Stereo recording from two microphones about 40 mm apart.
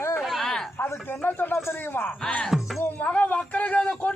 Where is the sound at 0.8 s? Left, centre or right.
Left.